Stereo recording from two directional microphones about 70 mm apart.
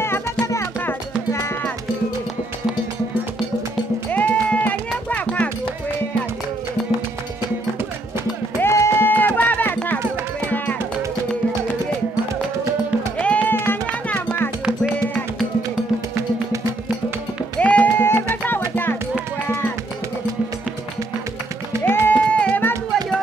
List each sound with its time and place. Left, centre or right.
0.4 s music: left
4.1 s music: left
8.5 s music: left
13.2 s music: centre
13.5 s music: left
14.0 s music: centre
17.6 s music: left
21.8 s music: left
22.3 s music: centre